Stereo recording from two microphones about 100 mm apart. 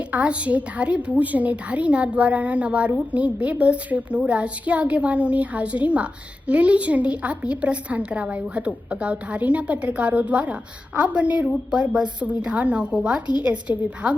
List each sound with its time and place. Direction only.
0.1 s a woman's voice: 15° right (ahead or behind)